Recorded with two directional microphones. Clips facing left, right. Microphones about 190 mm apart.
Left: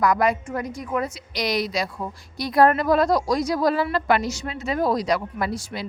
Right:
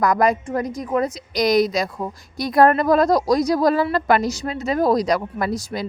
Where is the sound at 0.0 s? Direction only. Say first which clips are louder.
Right 2 dB; 40° right (ahead or behind).